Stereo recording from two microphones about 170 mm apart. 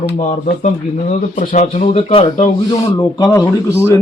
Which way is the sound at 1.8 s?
35° left (ahead or behind).